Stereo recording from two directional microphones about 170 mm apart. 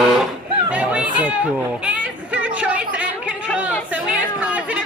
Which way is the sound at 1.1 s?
10° right (ahead or behind).